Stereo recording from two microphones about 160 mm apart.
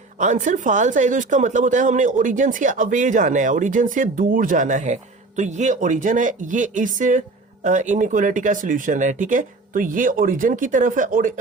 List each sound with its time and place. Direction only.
0.2 s speech: 50° right (ahead or behind)